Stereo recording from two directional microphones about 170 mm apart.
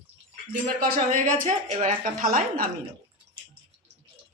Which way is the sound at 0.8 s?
55° right (ahead or behind).